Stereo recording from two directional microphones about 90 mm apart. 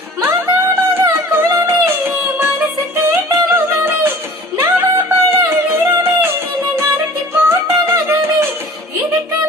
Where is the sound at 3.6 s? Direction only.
25° right (ahead or behind).